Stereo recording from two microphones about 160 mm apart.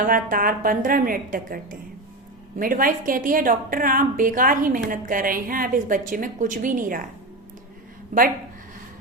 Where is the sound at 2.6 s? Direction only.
60° right (ahead or behind).